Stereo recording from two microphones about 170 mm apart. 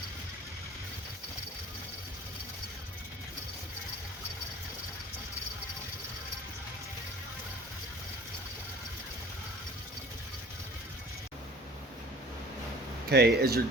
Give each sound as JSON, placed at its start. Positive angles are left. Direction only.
{"t": 13.1, "sound": "speech", "side_deg": -70}